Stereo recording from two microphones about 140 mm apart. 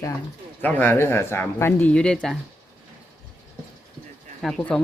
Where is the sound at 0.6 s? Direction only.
15° left (ahead or behind).